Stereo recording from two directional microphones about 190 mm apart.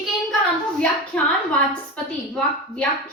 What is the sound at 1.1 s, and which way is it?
Speech, 10° left (ahead or behind).